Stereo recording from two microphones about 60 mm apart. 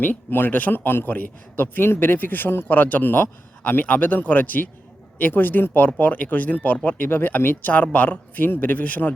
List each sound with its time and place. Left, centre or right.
0.0 s a man's voice: left